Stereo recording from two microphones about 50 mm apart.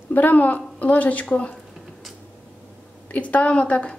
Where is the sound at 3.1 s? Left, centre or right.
Left.